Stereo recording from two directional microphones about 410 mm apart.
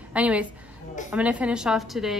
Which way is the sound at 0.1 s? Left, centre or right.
Centre.